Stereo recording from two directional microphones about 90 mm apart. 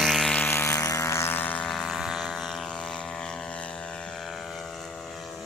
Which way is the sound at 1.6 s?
5° left (ahead or behind).